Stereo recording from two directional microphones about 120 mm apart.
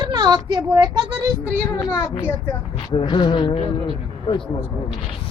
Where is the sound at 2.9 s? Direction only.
45° left (ahead or behind).